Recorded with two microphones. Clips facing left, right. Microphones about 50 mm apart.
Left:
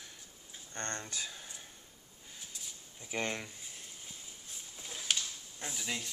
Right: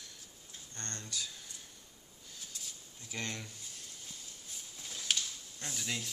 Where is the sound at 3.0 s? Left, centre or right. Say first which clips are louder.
Left 5 dB; left.